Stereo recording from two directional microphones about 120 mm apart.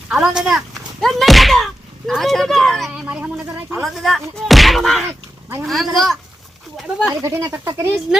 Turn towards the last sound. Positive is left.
turn(degrees=-20)  # may be behind; listen again after turning